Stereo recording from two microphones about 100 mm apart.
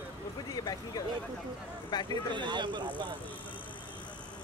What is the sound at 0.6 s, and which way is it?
Speech, 40° left (ahead or behind).